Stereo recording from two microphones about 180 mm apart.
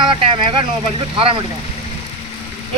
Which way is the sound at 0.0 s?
25° right (ahead or behind).